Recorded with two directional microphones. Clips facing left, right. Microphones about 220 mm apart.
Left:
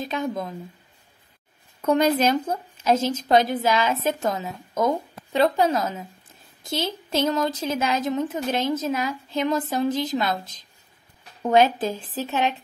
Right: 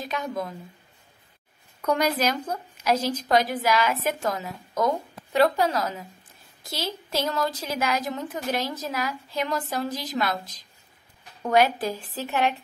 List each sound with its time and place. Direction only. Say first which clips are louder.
0.0 s a woman's voice: left 3 dB; 25° left (ahead or behind)
1.8 s a woman's voice: left 4 dB; 25° left (ahead or behind)